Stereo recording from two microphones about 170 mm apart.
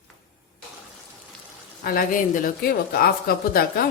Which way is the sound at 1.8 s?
60° left (ahead or behind).